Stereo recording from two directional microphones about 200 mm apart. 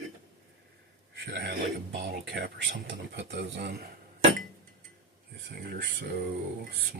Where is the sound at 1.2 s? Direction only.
55° right (ahead or behind).